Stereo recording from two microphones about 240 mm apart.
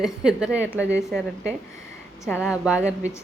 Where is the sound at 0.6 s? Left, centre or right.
Centre.